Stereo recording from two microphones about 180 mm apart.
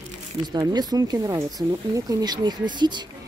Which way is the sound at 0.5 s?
20° right (ahead or behind).